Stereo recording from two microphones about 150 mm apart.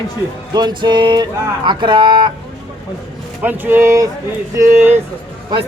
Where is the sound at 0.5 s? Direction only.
30° right (ahead or behind).